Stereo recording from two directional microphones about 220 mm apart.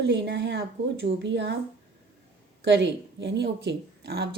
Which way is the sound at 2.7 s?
55° right (ahead or behind).